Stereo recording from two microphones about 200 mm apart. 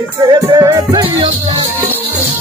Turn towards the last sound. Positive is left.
turn(degrees=-20)  # may be behind; listen again after turning